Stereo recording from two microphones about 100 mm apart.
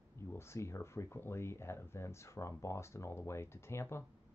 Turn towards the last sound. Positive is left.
turn(degrees=25)  # may be behind; listen again after turning